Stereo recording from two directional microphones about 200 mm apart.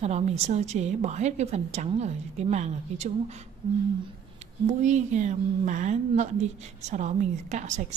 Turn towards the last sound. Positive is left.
turn(degrees=-35)  # may be behind; listen again after turning